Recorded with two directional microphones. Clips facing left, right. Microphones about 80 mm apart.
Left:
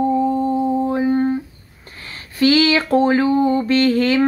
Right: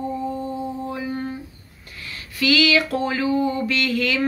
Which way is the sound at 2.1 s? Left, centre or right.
Left.